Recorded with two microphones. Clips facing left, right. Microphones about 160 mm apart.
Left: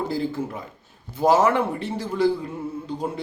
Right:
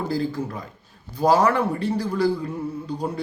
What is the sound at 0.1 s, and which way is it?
A man's voice, 20° left (ahead or behind).